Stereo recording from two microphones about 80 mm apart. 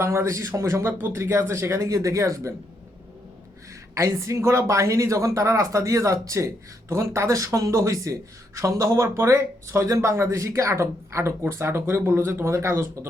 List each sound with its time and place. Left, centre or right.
0.0 s speech: right
3.9 s speech: right